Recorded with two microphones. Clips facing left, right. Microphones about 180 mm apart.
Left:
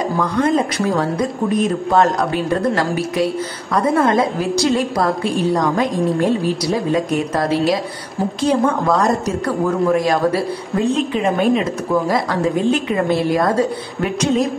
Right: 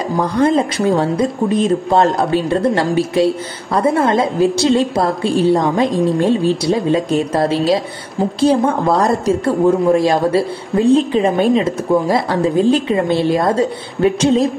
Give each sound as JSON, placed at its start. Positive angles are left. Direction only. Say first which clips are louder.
{"t": 0.2, "sound": "speech", "louder": "right 4 dB", "side_deg": -30}
{"t": 5.9, "sound": "a woman's voice", "louder": "right 3 dB", "side_deg": 0}
{"t": 6.1, "sound": "speech", "louder": "right 3 dB", "side_deg": -25}